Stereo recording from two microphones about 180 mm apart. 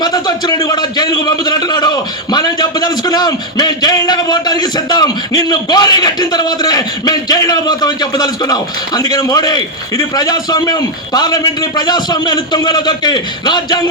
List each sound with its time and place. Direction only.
0.0 s a man's voice: 20° left (ahead or behind)